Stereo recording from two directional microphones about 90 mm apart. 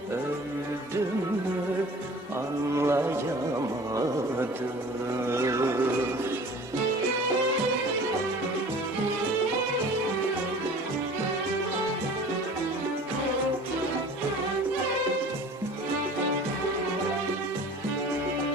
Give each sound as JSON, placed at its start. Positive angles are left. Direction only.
{"t": 2.7, "sound": "music", "side_deg": -30}
{"t": 5.3, "sound": "music", "side_deg": -35}